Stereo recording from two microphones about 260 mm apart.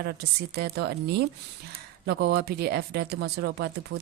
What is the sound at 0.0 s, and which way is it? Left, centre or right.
Speech, right.